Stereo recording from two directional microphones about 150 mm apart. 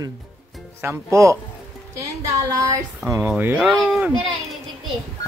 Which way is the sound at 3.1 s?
15° right (ahead or behind).